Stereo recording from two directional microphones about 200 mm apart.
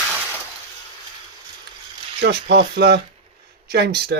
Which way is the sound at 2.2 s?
55° right (ahead or behind).